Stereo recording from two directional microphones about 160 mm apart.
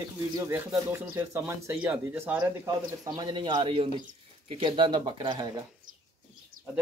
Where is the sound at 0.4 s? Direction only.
15° right (ahead or behind).